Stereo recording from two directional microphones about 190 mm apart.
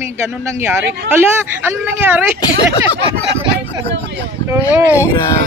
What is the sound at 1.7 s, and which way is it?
Speech, 10° right (ahead or behind).